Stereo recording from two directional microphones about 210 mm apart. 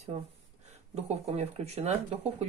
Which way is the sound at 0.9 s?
30° right (ahead or behind).